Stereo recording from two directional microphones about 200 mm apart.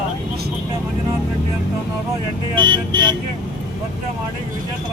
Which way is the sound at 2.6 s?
20° right (ahead or behind).